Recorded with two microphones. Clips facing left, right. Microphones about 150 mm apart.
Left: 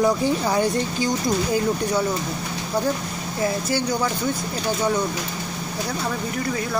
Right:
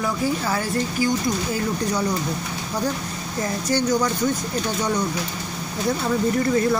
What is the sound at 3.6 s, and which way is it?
Speech, 10° left (ahead or behind).